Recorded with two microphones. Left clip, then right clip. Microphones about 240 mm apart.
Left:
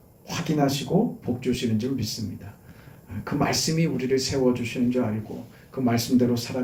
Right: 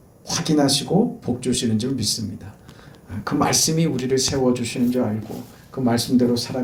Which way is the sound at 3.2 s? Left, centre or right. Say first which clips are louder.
Right 5 dB; centre.